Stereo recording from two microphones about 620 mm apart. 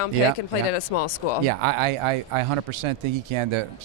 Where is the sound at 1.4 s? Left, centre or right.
Right.